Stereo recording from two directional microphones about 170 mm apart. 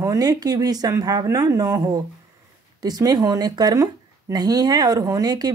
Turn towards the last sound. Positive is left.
turn(degrees=-20)  # may be behind; listen again after turning